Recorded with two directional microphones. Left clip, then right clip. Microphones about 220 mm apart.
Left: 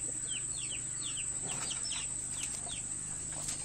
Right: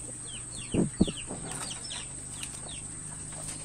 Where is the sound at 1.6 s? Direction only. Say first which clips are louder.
Even; 50° right (ahead or behind).